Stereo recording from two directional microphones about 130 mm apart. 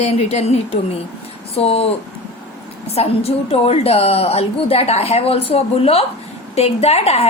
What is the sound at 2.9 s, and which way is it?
A woman's voice, 50° left (ahead or behind).